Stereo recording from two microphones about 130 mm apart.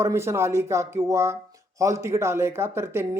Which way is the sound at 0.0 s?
20° right (ahead or behind).